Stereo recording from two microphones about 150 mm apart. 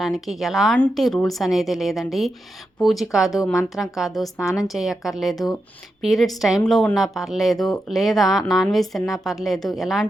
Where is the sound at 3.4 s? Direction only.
20° left (ahead or behind).